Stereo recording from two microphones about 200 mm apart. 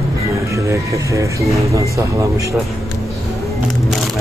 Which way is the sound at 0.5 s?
15° right (ahead or behind).